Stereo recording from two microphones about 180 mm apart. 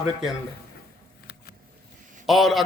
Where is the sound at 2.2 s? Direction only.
Centre (ahead or behind).